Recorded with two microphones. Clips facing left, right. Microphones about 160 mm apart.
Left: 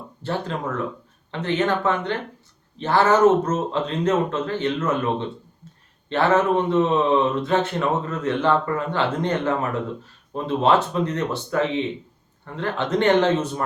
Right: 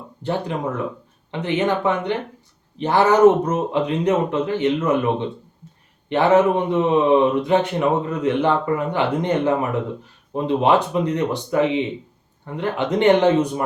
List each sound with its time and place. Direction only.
0.2 s a man's voice: 15° right (ahead or behind)